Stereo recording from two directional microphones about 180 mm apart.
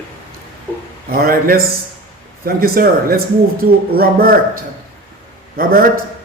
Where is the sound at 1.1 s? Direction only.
55° right (ahead or behind).